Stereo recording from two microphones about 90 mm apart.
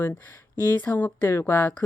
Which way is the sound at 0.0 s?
25° left (ahead or behind).